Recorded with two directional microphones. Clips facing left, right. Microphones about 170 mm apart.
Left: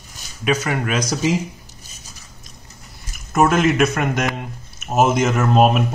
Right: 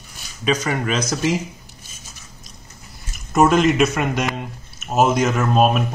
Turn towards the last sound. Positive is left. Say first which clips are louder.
# left 2 dB
turn(degrees=15)  # may be behind; listen again after turning